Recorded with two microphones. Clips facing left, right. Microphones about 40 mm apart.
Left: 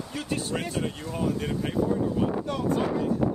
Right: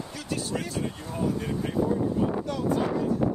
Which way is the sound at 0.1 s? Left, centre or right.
Left.